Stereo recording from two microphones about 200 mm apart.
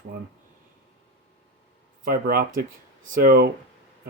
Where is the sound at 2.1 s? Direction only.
45° right (ahead or behind).